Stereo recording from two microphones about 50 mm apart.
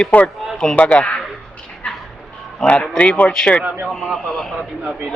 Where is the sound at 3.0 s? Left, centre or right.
Left.